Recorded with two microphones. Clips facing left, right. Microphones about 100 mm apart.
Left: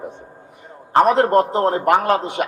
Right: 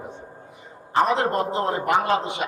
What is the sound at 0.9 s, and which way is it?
A man's voice, 55° left (ahead or behind).